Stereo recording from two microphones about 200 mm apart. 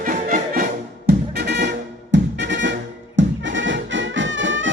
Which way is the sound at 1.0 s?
60° right (ahead or behind).